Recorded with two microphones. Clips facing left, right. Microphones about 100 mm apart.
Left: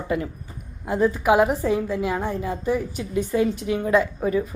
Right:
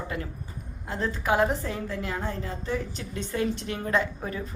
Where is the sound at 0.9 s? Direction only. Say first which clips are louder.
Left 8 dB; 15° left (ahead or behind).